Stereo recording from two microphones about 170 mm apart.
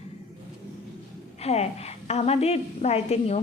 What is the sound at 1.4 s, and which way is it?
A woman's voice, 40° left (ahead or behind).